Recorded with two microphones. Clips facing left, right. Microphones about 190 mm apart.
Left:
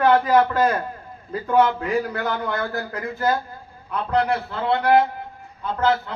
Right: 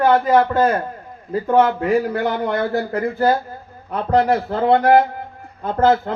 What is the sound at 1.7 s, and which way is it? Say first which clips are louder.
A man's voice: right 6 dB; 30° right (ahead or behind).